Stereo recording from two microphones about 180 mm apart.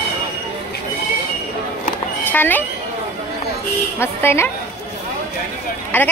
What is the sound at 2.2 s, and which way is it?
Speech, 10° left (ahead or behind).